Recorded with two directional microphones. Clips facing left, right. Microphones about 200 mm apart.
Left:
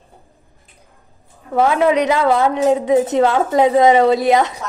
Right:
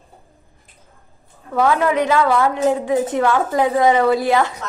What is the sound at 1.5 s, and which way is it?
A woman's voice, 20° left (ahead or behind).